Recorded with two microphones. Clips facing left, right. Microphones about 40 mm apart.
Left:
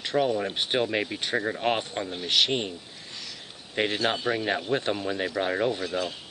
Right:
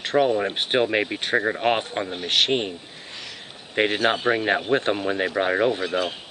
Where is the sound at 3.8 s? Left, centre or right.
Right.